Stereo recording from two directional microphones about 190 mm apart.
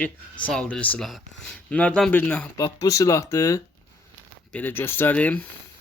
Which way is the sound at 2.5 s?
20° left (ahead or behind).